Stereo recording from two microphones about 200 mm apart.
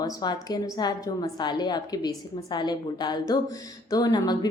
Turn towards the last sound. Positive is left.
turn(degrees=20)  # may be behind; listen again after turning